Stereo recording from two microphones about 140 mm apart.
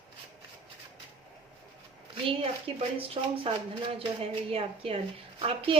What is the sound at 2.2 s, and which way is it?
Speech, 45° right (ahead or behind).